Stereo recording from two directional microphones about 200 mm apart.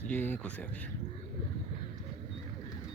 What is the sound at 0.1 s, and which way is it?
Speech, 10° left (ahead or behind).